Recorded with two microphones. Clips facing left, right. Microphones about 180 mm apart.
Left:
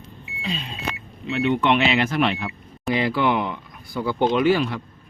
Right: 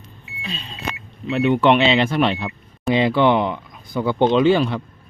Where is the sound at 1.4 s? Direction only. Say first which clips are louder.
Right 4 dB; 40° right (ahead or behind).